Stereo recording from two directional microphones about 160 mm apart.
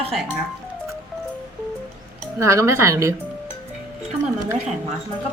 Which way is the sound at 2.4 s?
20° right (ahead or behind).